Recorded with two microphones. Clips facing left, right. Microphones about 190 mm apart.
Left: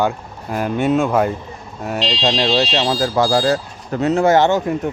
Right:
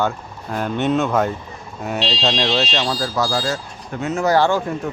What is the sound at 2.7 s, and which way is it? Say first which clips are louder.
Speech: left 4 dB; 35° left (ahead or behind).